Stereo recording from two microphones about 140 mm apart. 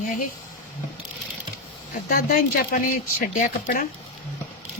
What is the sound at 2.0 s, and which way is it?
Speech, 90° left.